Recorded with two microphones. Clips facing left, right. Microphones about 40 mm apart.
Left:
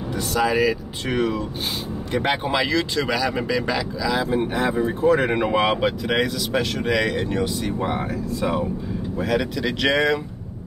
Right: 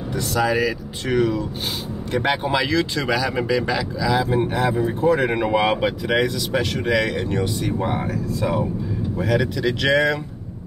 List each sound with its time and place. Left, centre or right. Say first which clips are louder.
0.3 s speech: left 1 dB; centre
1.1 s speech: right 3 dB; left
2.1 s speech: right 1 dB; centre
4.6 s speech: right 1 dB; centre
5.2 s speech: right 1 dB; centre
9.2 s speech: right 2 dB; centre